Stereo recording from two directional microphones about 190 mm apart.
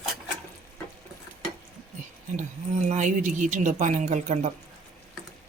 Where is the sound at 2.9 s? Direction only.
40° right (ahead or behind).